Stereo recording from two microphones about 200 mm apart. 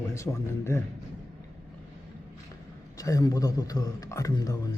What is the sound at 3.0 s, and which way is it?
A man's voice, 15° left (ahead or behind).